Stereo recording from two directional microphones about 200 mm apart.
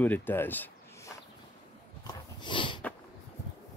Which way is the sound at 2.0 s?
25° left (ahead or behind).